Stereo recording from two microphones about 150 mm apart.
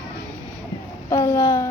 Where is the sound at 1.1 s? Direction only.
20° left (ahead or behind).